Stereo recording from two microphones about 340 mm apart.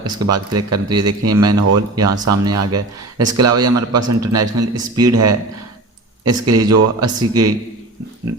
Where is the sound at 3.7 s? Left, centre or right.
Right.